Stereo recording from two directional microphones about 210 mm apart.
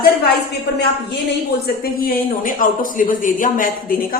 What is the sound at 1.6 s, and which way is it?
Speech, 45° left (ahead or behind).